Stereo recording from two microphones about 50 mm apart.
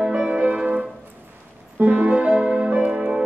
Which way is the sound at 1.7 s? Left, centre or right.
Right.